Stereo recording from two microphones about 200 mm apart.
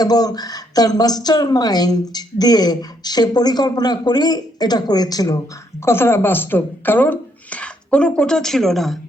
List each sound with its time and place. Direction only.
0.0 s a woman's voice: 20° left (ahead or behind); by 9.0 s centre (ahead or behind)